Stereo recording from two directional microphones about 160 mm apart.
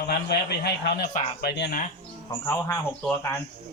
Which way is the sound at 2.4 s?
15° left (ahead or behind).